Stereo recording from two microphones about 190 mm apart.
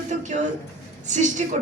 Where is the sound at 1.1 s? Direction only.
40° right (ahead or behind).